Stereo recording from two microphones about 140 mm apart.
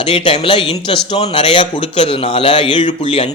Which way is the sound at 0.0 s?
40° left (ahead or behind).